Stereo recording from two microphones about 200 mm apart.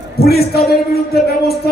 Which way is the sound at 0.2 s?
50° left (ahead or behind).